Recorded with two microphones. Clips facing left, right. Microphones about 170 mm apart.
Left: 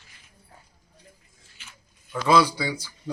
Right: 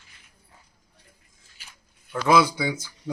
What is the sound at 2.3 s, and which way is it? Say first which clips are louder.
Speech: even; 15° right (ahead or behind).